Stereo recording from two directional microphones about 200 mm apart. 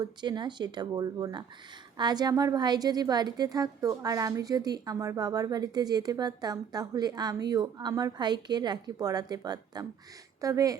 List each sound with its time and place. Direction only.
0.0 s a woman's voice: 20° right (ahead or behind)